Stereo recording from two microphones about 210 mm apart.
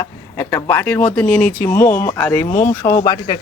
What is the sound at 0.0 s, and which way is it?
Speech, 10° left (ahead or behind).